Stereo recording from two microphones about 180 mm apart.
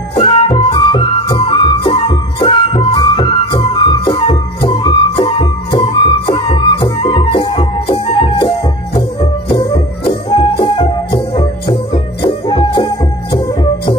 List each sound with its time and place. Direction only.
0.2 s music: 30° left (ahead or behind)